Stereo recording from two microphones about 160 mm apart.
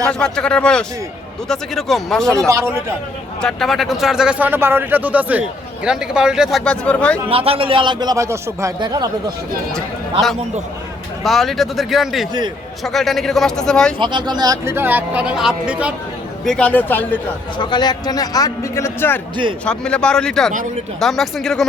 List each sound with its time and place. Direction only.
0.1 s a man's voice: 5° left (ahead or behind)
2.5 s speech: 15° right (ahead or behind)
3.4 s a man's voice: centre (ahead or behind)
7.3 s a man's voice: 35° right (ahead or behind)
9.7 s a man's voice: centre (ahead or behind)
14.0 s speech: 30° right (ahead or behind); by 15.9 s 5° right (ahead or behind)
16.4 s speech: 5° left (ahead or behind)
17.6 s a man's voice: 25° left (ahead or behind); by 21.6 s centre (ahead or behind)